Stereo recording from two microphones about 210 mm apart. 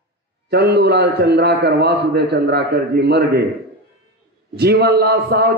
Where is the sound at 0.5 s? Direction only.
50° right (ahead or behind).